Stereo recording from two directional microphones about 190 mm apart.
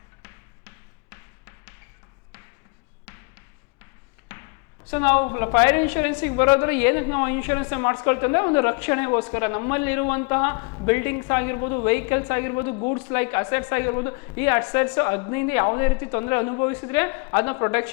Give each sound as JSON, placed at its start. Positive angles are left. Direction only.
{"t": 0.2, "sound": "music", "side_deg": 15}
{"t": 4.3, "sound": "speech", "side_deg": 15}